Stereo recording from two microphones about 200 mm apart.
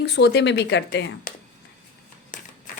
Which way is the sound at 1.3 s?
40° left (ahead or behind).